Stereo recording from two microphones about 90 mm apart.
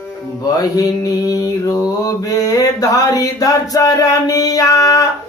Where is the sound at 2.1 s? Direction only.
40° left (ahead or behind).